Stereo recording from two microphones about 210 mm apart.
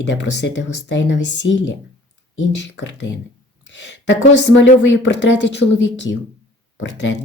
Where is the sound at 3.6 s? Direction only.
60° left (ahead or behind).